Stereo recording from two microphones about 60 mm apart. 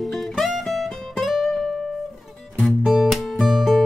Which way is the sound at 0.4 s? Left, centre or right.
Centre.